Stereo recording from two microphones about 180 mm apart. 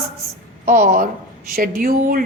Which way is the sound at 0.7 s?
45° right (ahead or behind).